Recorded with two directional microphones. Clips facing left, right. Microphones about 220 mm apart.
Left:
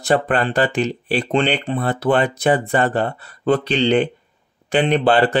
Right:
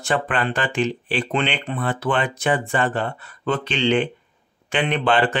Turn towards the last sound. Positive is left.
turn(degrees=35)  # may be behind; listen again after turning